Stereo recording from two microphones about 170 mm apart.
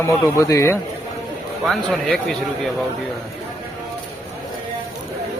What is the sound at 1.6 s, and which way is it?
Speech, centre (ahead or behind).